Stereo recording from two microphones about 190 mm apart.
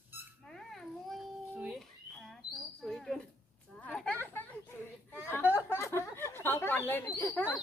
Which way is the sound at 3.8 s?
5° left (ahead or behind).